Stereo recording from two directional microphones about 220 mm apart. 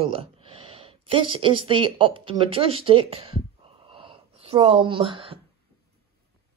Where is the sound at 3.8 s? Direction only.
25° right (ahead or behind).